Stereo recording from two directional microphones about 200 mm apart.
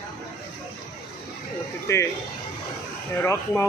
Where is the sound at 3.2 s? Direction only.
15° left (ahead or behind).